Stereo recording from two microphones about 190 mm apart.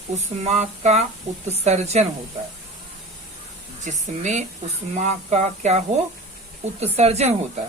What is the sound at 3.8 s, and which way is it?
Speech, 40° right (ahead or behind).